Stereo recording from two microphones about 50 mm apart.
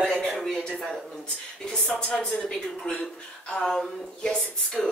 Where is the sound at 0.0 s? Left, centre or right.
Left.